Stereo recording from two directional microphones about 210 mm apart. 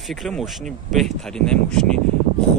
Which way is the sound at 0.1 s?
Centre (ahead or behind).